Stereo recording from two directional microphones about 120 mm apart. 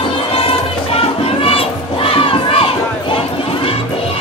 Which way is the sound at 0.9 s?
50° left (ahead or behind).